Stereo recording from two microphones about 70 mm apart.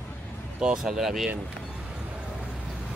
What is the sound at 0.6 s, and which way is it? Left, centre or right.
Speech, centre.